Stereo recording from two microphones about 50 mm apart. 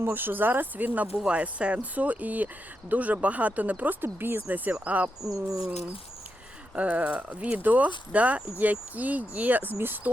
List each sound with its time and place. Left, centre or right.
0.0 s speech: right
1.1 s speech: centre
1.4 s speech: right
6.7 s speech: right